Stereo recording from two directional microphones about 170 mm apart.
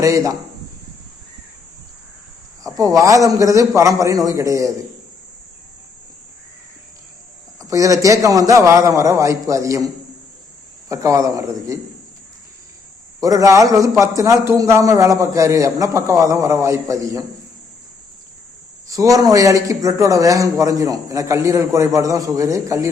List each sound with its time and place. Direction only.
0.0 s a man's voice: 20° right (ahead or behind)
2.6 s a man's voice: 20° right (ahead or behind)
7.6 s a man's voice: 20° right (ahead or behind)
10.8 s a man's voice: 20° right (ahead or behind)
13.1 s a man's voice: 20° right (ahead or behind)
18.9 s a man's voice: 20° right (ahead or behind)